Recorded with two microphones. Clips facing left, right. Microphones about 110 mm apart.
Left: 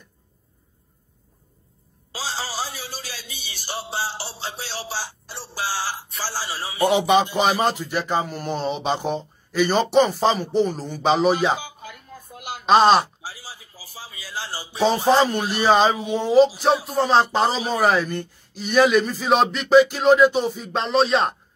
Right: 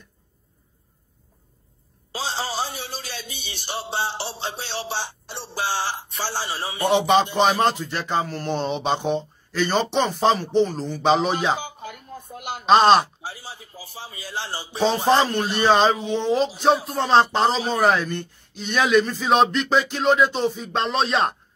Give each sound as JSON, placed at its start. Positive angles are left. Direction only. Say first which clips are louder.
{"t": 2.1, "sound": "speech", "louder": "right 2 dB", "side_deg": -25}
{"t": 7.3, "sound": "speech", "louder": "right 1 dB", "side_deg": 5}
{"t": 9.5, "sound": "speech", "louder": "left 3 dB", "side_deg": 10}
{"t": 11.6, "sound": "a sound", "louder": "right 3 dB", "side_deg": -35}
{"t": 12.6, "sound": "speech", "louder": "even", "side_deg": 0}
{"t": 13.2, "sound": "speech", "louder": "right 2 dB", "side_deg": -25}
{"t": 14.8, "sound": "speech", "louder": "left 1 dB", "side_deg": 0}